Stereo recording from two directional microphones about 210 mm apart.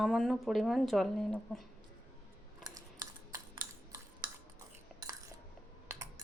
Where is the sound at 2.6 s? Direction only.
15° right (ahead or behind).